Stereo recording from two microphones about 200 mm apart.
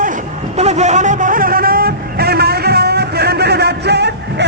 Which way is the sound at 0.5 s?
35° right (ahead or behind).